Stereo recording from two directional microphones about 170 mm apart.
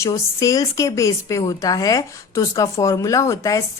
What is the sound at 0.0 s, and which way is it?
Speech, 20° left (ahead or behind).